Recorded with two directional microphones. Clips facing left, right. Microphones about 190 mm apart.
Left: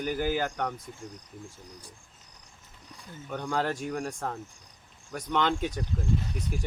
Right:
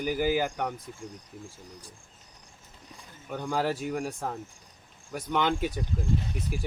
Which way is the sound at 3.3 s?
5° right (ahead or behind).